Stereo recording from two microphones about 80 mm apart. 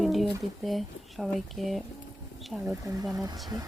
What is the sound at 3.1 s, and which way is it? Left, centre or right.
Speech, right.